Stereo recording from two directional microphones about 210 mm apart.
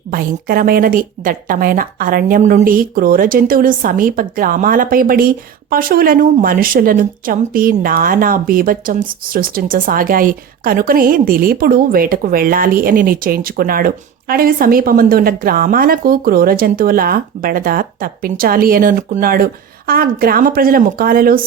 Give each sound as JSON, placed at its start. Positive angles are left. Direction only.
{"t": 0.1, "sound": "speech", "side_deg": -40}